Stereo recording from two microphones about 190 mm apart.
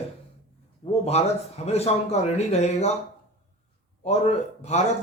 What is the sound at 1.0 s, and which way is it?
A man's voice, 35° left (ahead or behind).